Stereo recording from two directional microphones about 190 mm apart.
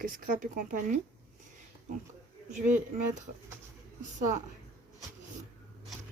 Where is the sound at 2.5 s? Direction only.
40° right (ahead or behind).